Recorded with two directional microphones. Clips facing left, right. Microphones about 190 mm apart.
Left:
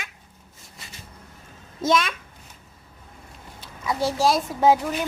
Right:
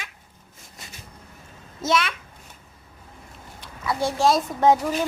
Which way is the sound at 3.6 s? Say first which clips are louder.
Even; 10° left (ahead or behind).